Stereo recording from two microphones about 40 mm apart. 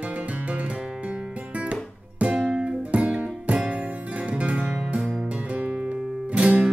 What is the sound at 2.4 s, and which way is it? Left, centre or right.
Music, centre.